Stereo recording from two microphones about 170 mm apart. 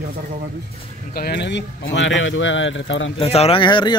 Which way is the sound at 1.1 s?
70° left (ahead or behind).